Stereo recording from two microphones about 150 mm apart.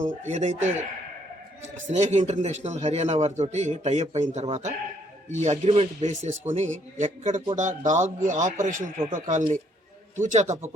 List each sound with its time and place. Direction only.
0.0 s a man's voice: 50° right (ahead or behind)